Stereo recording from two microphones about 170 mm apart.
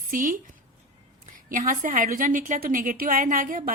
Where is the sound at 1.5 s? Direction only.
50° right (ahead or behind).